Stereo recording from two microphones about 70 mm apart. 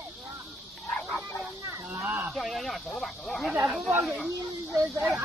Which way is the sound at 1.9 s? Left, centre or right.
Right.